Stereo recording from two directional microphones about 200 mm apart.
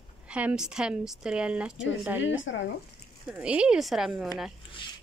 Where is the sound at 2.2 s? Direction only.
70° left (ahead or behind).